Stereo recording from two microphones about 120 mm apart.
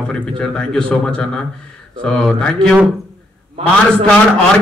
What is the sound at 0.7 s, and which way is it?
A man's voice, 5° left (ahead or behind).